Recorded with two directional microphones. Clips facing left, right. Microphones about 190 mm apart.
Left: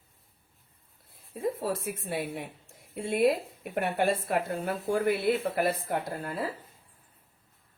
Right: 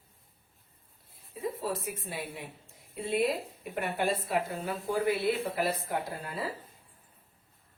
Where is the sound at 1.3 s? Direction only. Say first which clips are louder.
Left 3 dB; 50° left (ahead or behind).